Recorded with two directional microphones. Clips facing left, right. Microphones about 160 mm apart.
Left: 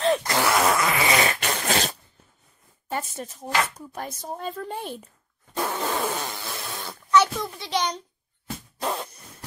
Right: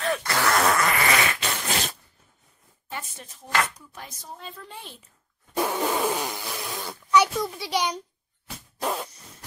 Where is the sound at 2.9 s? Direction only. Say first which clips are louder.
Left 7 dB; 40° left (ahead or behind).